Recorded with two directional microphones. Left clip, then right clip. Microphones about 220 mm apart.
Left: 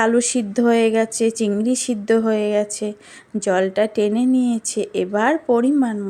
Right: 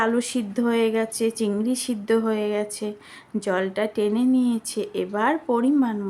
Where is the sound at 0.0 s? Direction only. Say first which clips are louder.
Left 5 dB; 15° left (ahead or behind).